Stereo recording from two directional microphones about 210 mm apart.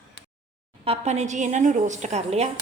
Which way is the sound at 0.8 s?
30° right (ahead or behind).